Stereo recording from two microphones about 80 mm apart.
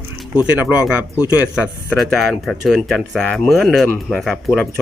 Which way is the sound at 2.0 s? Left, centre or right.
Centre.